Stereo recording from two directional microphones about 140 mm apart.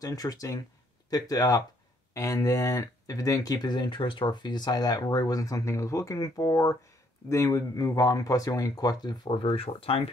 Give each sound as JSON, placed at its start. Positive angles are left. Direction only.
{"t": 0.0, "sound": "speech", "side_deg": 25}